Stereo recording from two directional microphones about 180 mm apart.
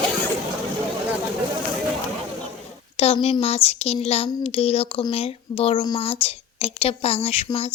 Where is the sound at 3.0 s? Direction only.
35° left (ahead or behind).